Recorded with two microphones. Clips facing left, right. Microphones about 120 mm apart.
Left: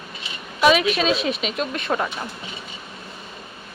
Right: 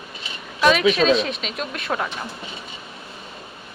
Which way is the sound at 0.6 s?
5° left (ahead or behind).